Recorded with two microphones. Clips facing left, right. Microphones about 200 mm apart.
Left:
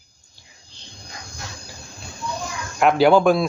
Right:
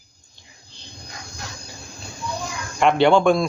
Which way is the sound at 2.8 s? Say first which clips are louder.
Left 1 dB; 5° left (ahead or behind).